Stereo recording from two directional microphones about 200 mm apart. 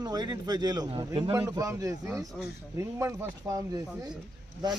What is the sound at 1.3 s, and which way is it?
Speech, 15° right (ahead or behind).